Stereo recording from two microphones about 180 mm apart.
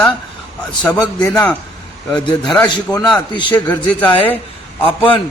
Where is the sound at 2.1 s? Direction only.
25° left (ahead or behind).